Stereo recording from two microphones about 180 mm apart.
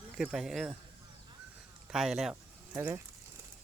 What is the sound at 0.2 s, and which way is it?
Speech, 5° right (ahead or behind).